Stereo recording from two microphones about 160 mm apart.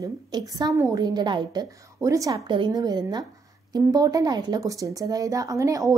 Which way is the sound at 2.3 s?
30° right (ahead or behind).